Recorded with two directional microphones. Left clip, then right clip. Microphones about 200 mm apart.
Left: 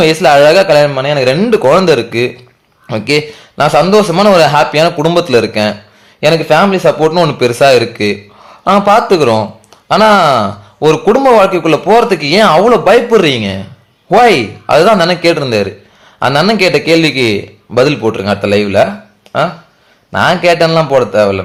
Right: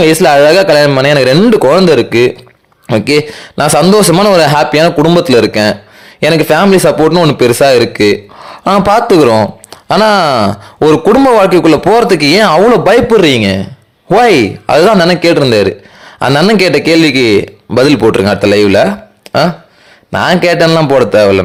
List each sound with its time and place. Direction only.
0.0 s a man's voice: 40° right (ahead or behind)
6.1 s speech: 50° right (ahead or behind)
7.1 s speech: 40° right (ahead or behind)